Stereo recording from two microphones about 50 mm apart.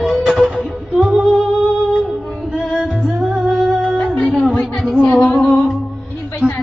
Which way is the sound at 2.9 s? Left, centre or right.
Centre.